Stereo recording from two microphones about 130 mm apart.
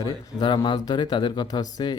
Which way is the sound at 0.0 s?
35° left (ahead or behind).